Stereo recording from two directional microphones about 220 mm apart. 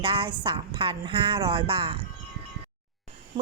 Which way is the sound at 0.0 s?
25° right (ahead or behind).